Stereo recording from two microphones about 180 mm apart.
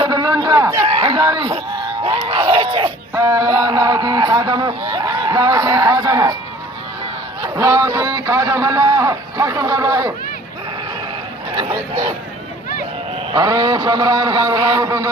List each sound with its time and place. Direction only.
0.0 s a sound: 20° right (ahead or behind)
0.9 s speech: 25° right (ahead or behind)
3.2 s speech: 15° right (ahead or behind)
7.4 s speech: 20° right (ahead or behind)
11.5 s speech: 30° right (ahead or behind)
13.3 s speech: 25° right (ahead or behind)